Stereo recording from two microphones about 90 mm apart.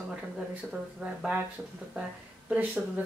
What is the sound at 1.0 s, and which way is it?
Speech, 15° right (ahead or behind).